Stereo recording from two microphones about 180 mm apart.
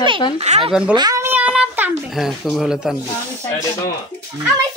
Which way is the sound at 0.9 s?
20° right (ahead or behind).